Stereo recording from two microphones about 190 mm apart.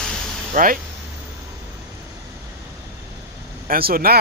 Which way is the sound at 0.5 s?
45° right (ahead or behind).